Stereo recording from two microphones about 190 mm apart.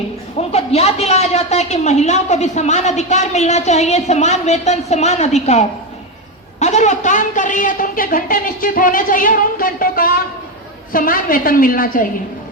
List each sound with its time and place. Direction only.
0.3 s a woman's voice: 35° left (ahead or behind)